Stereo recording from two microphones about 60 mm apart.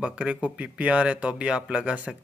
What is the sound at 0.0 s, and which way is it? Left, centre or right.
Speech, centre.